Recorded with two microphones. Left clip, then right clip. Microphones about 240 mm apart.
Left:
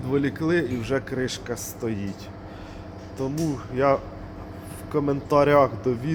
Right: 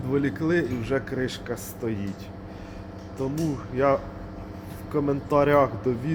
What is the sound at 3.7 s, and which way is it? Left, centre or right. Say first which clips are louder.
Speech: left 1 dB; centre.